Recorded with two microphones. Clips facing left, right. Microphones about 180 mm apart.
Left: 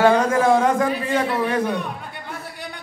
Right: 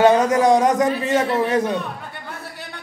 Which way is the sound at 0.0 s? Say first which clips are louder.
Right 2 dB; 20° right (ahead or behind).